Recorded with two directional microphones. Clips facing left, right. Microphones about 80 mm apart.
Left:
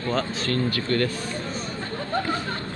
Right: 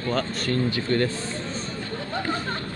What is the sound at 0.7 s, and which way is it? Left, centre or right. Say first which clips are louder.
Speech: even; centre.